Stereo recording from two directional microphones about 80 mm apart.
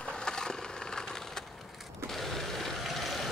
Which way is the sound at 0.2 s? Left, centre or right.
Centre.